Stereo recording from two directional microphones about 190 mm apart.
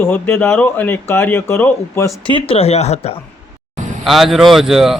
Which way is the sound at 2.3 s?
30° left (ahead or behind).